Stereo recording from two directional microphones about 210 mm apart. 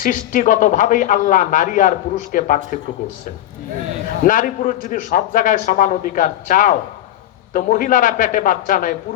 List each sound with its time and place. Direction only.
0.0 s a man's voice: 40° left (ahead or behind)
4.2 s a man's voice: 40° left (ahead or behind)